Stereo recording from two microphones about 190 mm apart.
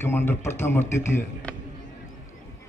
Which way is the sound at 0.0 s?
10° left (ahead or behind).